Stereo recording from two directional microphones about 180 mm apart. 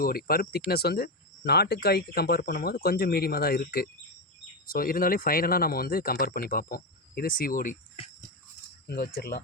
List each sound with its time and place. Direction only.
0.0 s speech: 55° left (ahead or behind)
8.9 s speech: 60° left (ahead or behind)